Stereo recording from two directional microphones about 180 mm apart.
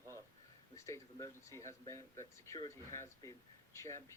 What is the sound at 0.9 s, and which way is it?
Speech, 15° left (ahead or behind).